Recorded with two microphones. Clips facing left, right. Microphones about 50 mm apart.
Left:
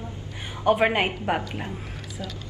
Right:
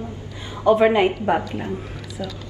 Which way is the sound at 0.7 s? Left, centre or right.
Left.